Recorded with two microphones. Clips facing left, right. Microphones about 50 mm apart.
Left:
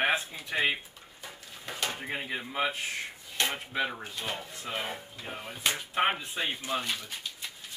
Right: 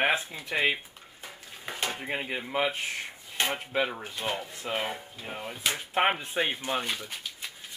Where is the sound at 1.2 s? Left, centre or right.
Centre.